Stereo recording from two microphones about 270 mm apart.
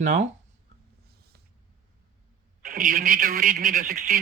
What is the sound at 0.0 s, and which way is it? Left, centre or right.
Speech, right.